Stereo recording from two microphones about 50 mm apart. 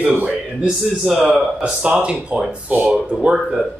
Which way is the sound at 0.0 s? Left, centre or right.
Right.